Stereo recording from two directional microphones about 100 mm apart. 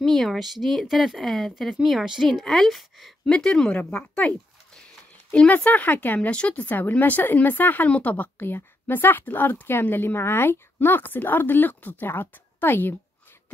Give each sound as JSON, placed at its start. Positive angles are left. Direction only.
{"t": 0.0, "sound": "a woman's voice", "side_deg": 0}
{"t": 5.3, "sound": "speech", "side_deg": 15}